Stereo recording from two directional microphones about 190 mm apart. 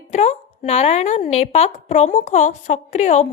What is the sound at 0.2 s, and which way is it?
A woman's voice, 35° left (ahead or behind).